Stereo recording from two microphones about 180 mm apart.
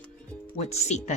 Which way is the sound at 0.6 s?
35° left (ahead or behind).